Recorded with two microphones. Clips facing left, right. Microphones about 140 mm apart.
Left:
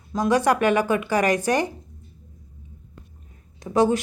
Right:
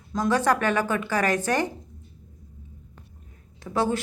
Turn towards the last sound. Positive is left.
turn(degrees=15)  # may be behind; listen again after turning